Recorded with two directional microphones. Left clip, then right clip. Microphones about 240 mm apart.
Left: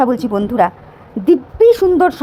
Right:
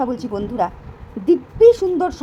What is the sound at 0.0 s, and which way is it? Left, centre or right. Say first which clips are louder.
A woman's voice: left 8 dB; left.